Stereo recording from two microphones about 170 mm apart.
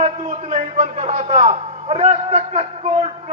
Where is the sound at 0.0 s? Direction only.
45° right (ahead or behind).